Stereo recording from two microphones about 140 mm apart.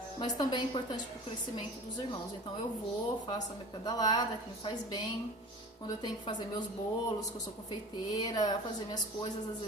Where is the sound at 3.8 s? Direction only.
30° left (ahead or behind).